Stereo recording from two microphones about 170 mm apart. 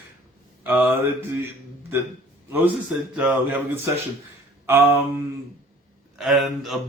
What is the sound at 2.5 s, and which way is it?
Speech, 10° right (ahead or behind).